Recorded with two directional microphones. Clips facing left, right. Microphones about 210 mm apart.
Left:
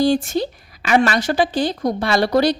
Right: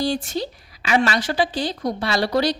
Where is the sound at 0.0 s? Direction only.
50° left (ahead or behind).